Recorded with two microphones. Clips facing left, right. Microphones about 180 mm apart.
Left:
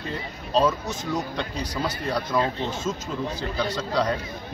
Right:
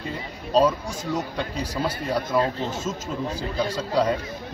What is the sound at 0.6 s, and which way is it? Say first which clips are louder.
Speech: right 2 dB; 10° right (ahead or behind).